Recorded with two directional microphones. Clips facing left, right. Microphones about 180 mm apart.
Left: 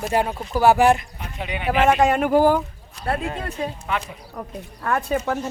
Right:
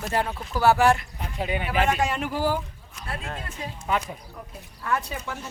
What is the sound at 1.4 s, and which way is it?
Speech, 40° right (ahead or behind).